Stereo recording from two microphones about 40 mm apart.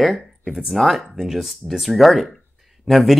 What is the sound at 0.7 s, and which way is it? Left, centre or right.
Speech, centre.